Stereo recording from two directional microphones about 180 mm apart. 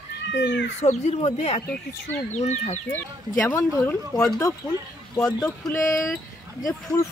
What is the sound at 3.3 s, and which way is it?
Speech, 10° left (ahead or behind).